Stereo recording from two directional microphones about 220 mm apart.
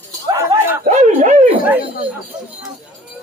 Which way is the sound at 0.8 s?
30° right (ahead or behind).